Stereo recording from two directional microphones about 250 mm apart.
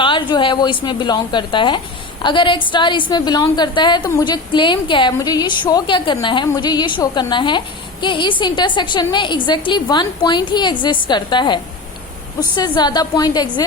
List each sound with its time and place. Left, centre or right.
0.0 s a woman's voice: centre